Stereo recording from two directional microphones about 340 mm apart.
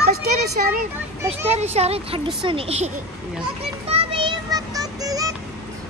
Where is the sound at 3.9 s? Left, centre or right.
Centre.